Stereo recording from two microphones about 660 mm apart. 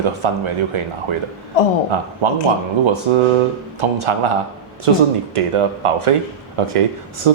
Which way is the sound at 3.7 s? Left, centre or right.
Right.